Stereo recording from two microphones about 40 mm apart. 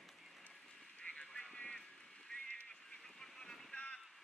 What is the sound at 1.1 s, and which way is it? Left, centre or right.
Vehicle, centre.